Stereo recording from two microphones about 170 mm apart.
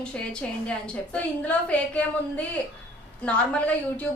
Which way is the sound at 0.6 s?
10° left (ahead or behind).